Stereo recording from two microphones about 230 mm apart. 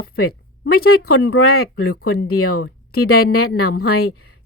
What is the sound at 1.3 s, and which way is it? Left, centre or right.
Speech, left.